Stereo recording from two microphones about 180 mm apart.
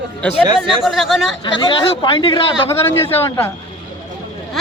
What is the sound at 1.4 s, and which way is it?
Speech, 30° left (ahead or behind).